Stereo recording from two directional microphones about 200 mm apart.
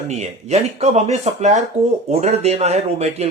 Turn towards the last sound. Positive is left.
turn(degrees=-30)  # may be behind; listen again after turning